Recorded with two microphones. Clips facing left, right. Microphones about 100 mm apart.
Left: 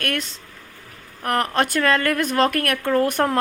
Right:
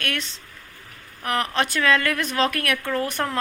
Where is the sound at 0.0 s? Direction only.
45° left (ahead or behind).